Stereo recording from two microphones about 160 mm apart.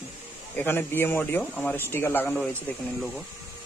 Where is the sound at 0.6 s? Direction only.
15° left (ahead or behind).